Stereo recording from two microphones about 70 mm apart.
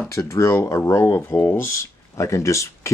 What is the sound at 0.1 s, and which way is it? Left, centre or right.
Speech, left.